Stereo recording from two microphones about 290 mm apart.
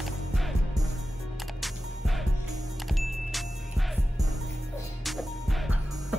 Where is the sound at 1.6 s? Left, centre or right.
Centre.